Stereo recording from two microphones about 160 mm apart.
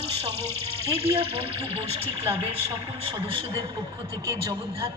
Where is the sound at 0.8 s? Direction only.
35° right (ahead or behind).